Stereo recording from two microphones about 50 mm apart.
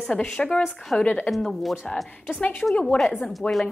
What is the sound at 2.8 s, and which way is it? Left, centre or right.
Speech, centre.